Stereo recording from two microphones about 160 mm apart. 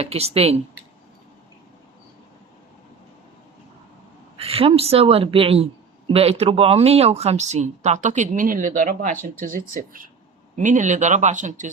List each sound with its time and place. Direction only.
0.0 s a woman's voice: 40° right (ahead or behind)
4.4 s a woman's voice: 35° right (ahead or behind)